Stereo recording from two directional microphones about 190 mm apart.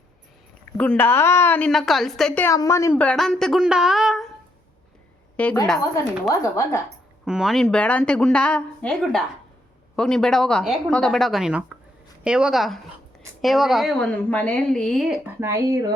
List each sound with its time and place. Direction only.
0.8 s a woman's voice: 10° left (ahead or behind)
5.4 s a woman's voice: 5° left (ahead or behind)
7.3 s a woman's voice: 5° right (ahead or behind)
15.4 s speech: 15° right (ahead or behind)